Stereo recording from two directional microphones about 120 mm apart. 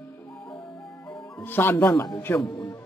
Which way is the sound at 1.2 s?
20° left (ahead or behind).